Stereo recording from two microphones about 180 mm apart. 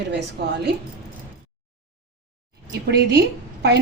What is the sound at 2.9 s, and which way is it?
Speech, 65° right (ahead or behind).